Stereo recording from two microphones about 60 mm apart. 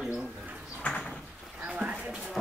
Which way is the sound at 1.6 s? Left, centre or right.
Right.